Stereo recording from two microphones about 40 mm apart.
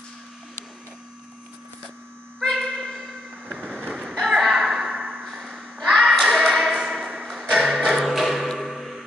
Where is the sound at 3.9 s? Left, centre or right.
Centre.